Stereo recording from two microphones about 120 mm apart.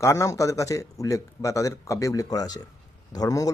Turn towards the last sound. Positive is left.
turn(degrees=30)  # may be behind; listen again after turning